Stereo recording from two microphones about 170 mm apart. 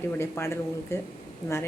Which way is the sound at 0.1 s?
15° left (ahead or behind).